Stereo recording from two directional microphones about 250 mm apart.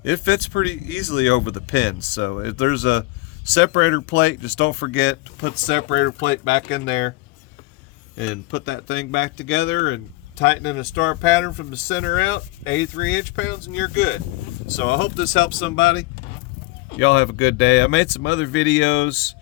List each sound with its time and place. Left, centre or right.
0.0 s speech: left
8.3 s speech: left